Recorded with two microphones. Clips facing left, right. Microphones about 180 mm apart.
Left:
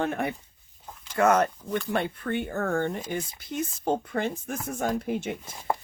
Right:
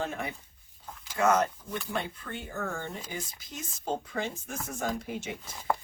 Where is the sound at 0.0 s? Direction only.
60° left (ahead or behind).